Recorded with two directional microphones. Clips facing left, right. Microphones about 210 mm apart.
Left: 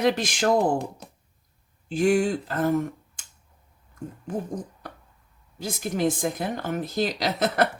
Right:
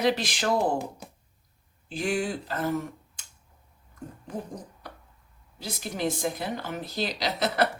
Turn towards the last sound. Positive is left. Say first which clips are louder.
# left 3 dB
turn(degrees=50)  # may be behind; listen again after turning